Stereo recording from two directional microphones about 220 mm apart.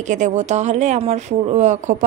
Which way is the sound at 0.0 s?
35° right (ahead or behind).